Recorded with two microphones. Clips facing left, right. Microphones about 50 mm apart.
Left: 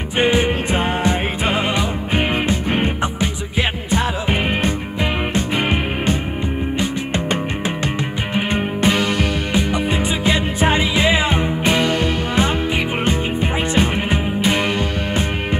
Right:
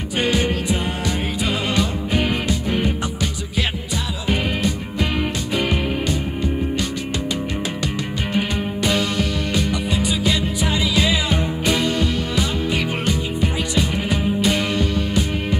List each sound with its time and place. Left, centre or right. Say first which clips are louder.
0.2 s music: left 4 dB; left
7.8 s music: left 2 dB; left
12.6 s music: left 2 dB; left